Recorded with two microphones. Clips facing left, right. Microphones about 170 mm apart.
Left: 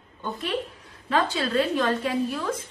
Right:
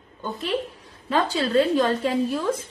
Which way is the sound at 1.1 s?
30° right (ahead or behind).